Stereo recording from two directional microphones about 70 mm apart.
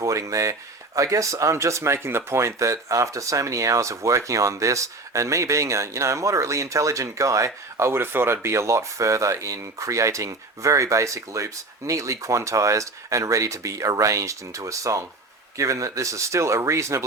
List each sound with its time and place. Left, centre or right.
0.0 s speech: right